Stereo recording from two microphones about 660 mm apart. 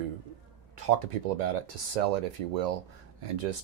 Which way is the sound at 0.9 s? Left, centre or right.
Right.